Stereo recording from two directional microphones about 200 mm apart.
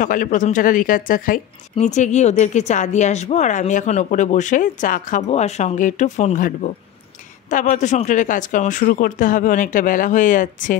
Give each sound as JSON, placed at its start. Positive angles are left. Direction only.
{"t": 0.0, "sound": "speech", "side_deg": 40}